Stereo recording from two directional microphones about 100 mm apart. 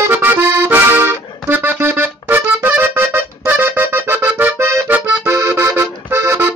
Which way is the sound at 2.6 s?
20° right (ahead or behind).